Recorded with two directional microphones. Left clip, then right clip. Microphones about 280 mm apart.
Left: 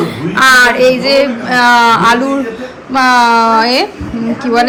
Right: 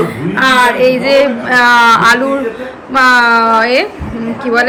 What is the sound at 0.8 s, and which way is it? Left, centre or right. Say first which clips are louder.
A woman's voice: even; centre.